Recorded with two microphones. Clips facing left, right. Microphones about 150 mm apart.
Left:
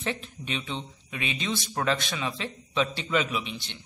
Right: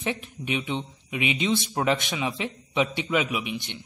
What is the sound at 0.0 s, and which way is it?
Speech, 15° right (ahead or behind).